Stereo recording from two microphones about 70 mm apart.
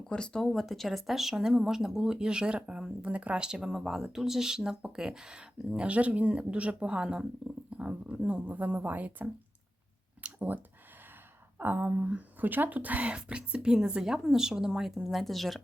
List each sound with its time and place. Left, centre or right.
0.0 s speech: centre; by 9.3 s right
10.2 s a sound: right
11.6 s speech: right; by 15.6 s centre